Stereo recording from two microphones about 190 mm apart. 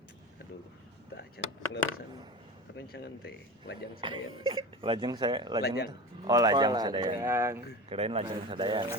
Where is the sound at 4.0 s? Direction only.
25° right (ahead or behind).